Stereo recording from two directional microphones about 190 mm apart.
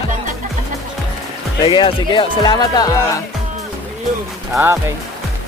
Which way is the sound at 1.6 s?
25° left (ahead or behind).